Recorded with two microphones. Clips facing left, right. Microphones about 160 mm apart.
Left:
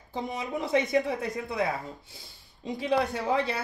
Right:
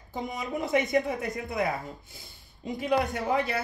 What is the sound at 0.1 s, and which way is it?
Speech, 30° left (ahead or behind).